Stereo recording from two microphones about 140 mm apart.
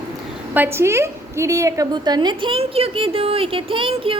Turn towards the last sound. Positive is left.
turn(degrees=-40)  # may be behind; listen again after turning